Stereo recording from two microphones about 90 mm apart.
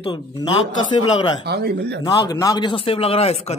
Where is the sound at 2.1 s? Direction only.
40° left (ahead or behind).